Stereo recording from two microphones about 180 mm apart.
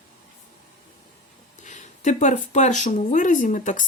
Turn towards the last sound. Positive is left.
turn(degrees=45)  # may be behind; listen again after turning